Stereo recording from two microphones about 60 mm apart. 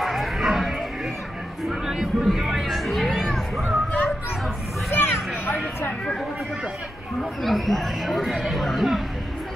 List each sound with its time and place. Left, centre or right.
0.0 s music: centre
4.9 s a sound: left
7.4 s speech: centre